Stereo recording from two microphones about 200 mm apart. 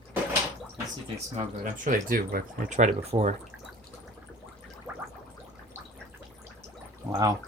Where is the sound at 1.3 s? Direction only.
40° right (ahead or behind).